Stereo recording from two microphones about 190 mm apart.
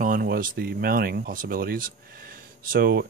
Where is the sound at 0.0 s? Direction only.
50° right (ahead or behind).